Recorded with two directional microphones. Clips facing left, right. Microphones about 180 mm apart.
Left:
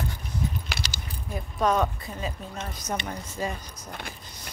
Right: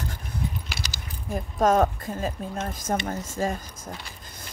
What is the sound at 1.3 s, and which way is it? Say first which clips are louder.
Speech: right 4 dB; 45° right (ahead or behind).